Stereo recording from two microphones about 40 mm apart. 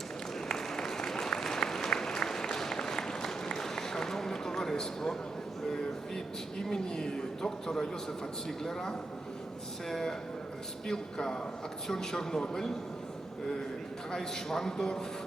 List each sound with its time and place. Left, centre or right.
0.4 s applause: centre
2.6 s a sound: centre
8.4 s a man's voice: centre
14.1 s a man's voice: centre